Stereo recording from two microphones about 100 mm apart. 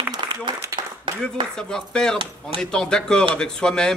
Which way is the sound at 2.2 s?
65° right (ahead or behind).